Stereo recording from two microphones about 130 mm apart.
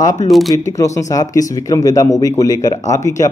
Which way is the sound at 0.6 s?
25° left (ahead or behind).